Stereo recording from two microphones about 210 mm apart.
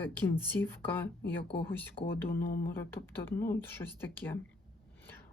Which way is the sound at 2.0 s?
25° left (ahead or behind).